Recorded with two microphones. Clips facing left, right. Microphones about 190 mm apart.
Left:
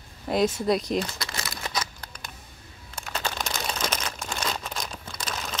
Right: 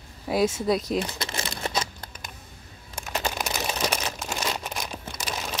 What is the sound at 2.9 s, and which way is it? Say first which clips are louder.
Crumpling: right 2 dB; 15° right (ahead or behind).